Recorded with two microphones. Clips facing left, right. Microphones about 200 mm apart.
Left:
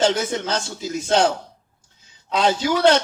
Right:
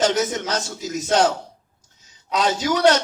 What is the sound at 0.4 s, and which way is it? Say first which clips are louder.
Speech: left 1 dB; 30° left (ahead or behind).